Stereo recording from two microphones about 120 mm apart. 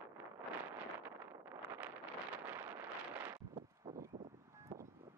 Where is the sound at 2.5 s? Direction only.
15° right (ahead or behind).